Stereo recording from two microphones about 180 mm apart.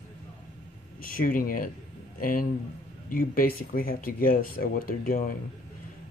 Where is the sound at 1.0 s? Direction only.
50° left (ahead or behind).